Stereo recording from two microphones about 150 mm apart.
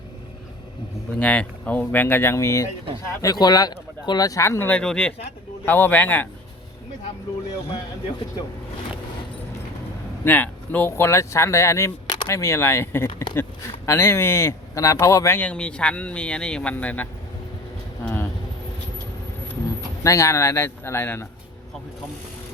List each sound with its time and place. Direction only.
1.2 s speech: 10° left (ahead or behind)
10.2 s speech: 10° left (ahead or behind); by 12.4 s 30° left (ahead or behind)
12.4 s speech: 20° left (ahead or behind)
18.0 s a sound: 15° left (ahead or behind)
20.1 s speech: 20° left (ahead or behind)